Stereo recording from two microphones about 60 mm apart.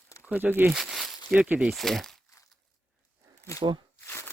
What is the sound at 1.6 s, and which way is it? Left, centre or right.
Speech, centre.